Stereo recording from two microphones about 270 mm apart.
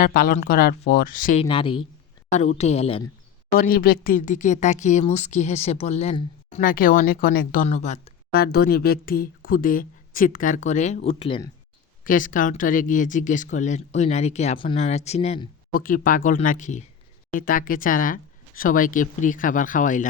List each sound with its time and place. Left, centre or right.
0.0 s speech: left
3.5 s speech: left; by 11.5 s centre
12.0 s speech: left